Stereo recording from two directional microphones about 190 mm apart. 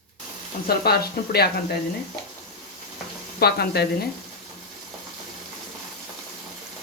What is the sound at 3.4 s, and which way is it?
Speech, 55° left (ahead or behind).